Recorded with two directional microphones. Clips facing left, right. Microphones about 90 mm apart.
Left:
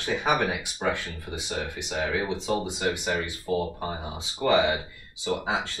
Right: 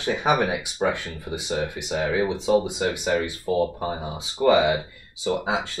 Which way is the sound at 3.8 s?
5° right (ahead or behind).